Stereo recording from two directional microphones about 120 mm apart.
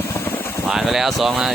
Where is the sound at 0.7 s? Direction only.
5° right (ahead or behind).